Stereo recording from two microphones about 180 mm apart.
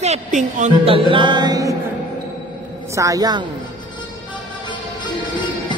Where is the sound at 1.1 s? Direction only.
25° right (ahead or behind).